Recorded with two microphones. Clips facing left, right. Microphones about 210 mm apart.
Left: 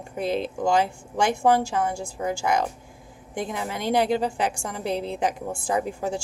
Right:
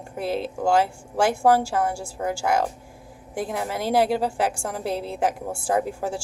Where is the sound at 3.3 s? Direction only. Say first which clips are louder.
Right 2 dB; 5° right (ahead or behind).